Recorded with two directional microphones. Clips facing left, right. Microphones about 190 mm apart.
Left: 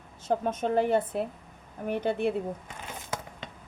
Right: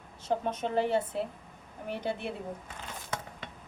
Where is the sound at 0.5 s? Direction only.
50° left (ahead or behind).